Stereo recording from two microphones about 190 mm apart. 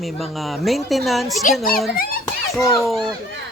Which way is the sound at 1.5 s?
50° left (ahead or behind).